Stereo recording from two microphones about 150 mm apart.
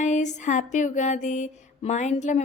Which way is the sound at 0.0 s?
55° left (ahead or behind).